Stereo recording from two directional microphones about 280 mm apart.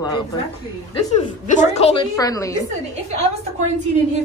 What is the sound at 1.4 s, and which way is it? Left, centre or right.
A woman's voice, left.